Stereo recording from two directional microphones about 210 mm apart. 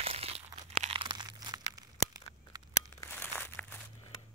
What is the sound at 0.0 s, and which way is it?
Crumpling, 30° right (ahead or behind).